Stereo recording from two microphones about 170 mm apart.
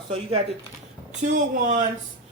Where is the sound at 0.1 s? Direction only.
35° right (ahead or behind).